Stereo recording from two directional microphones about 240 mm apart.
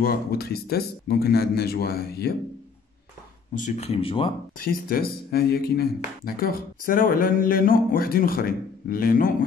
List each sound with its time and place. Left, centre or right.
0.0 s speech: left
3.5 s speech: left
4.6 s speech: left